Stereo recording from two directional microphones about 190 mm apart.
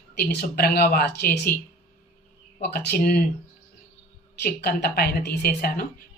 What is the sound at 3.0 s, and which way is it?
Speech, 55° left (ahead or behind).